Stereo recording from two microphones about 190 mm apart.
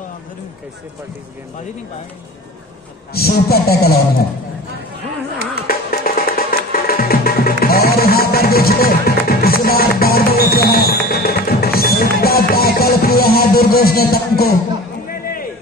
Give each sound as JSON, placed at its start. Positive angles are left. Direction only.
{"t": 3.1, "sound": "speech", "side_deg": 55}
{"t": 5.7, "sound": "music", "side_deg": 50}
{"t": 15.0, "sound": "a sound", "side_deg": 50}